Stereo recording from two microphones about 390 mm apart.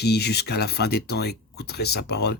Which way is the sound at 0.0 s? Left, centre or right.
Left.